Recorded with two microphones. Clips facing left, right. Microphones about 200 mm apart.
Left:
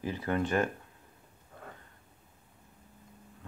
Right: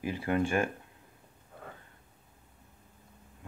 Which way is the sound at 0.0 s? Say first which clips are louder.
Right 2 dB; 10° right (ahead or behind).